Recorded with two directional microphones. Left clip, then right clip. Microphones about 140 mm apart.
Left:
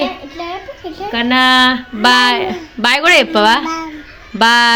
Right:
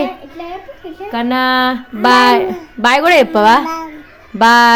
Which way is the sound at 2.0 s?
30° right (ahead or behind).